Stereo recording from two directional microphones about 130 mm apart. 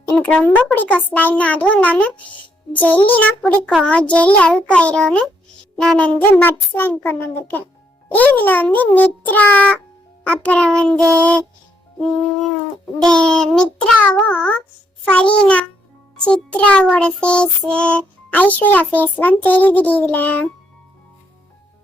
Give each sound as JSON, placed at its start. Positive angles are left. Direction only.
{"t": 0.0, "sound": "a sound", "side_deg": 20}
{"t": 0.3, "sound": "music", "side_deg": 10}
{"t": 5.8, "sound": "child singing", "side_deg": 5}
{"t": 6.1, "sound": "music", "side_deg": 15}
{"t": 13.1, "sound": "child singing", "side_deg": 5}
{"t": 15.1, "sound": "music", "side_deg": 10}